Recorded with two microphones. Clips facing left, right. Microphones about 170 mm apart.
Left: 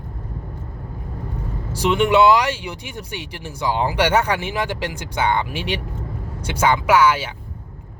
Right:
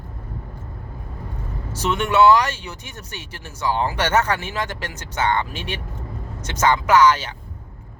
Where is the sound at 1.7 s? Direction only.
15° left (ahead or behind).